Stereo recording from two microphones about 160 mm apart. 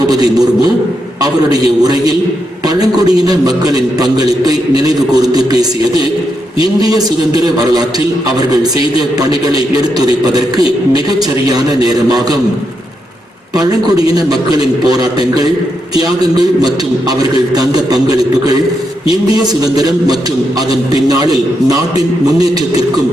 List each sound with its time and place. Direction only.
0.1 s a man's voice: 25° right (ahead or behind)
13.6 s a man's voice: 25° right (ahead or behind)
17.1 s a man's voice: 25° right (ahead or behind)
19.7 s a man's voice: 25° right (ahead or behind)